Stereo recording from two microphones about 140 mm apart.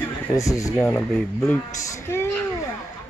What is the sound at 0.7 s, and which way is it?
Speech, 10° left (ahead or behind).